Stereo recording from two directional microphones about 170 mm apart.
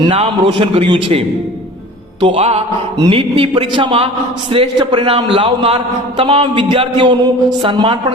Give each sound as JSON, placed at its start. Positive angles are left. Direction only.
{"t": 0.2, "sound": "a man's voice", "side_deg": -35}
{"t": 2.2, "sound": "a man's voice", "side_deg": -35}